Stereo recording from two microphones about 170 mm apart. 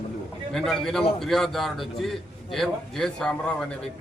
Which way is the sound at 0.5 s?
Centre (ahead or behind).